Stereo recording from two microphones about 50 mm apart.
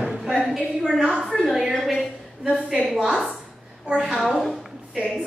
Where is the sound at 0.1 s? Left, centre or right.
Centre.